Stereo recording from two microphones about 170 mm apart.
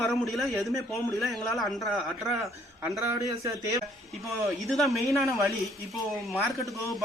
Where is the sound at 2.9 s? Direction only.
20° right (ahead or behind).